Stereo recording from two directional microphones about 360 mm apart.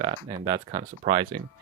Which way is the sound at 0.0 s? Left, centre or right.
Centre.